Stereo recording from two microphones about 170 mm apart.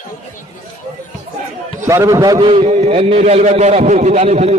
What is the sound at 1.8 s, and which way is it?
A man's voice, 20° right (ahead or behind).